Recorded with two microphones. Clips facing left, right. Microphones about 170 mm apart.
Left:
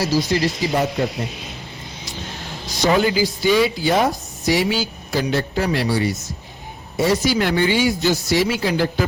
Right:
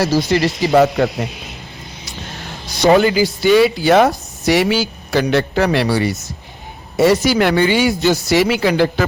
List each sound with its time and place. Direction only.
0.0 s a woman's voice: 65° right (ahead or behind)
2.9 s a woman's voice: 65° right (ahead or behind)